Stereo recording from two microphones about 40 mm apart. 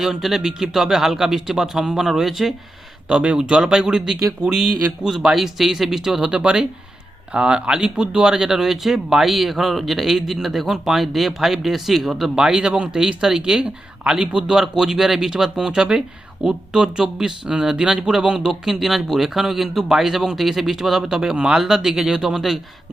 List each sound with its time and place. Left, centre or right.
0.0 s speech: centre
3.1 s speech: right
6.2 s speech: right; by 12.5 s centre
12.5 s speech: centre
21.8 s speech: centre